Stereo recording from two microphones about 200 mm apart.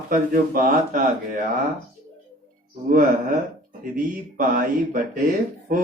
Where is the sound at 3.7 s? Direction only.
45° right (ahead or behind).